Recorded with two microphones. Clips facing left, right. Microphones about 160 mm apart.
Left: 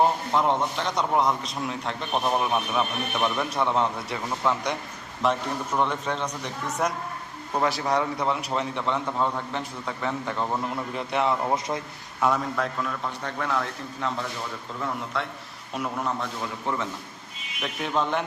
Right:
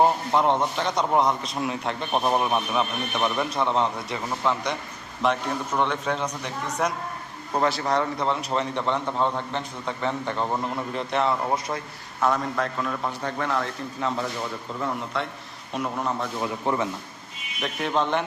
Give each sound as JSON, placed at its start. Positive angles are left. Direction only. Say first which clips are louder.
{"t": 0.0, "sound": "a sound", "louder": "right 2 dB", "side_deg": -10}
{"t": 0.4, "sound": "a man's voice", "louder": "right 2 dB", "side_deg": 0}
{"t": 11.1, "sound": "a man's voice", "louder": "even", "side_deg": 10}
{"t": 16.4, "sound": "a man's voice", "louder": "right 4 dB", "side_deg": -15}
{"t": 17.6, "sound": "a man's voice", "louder": "right 2 dB", "side_deg": 5}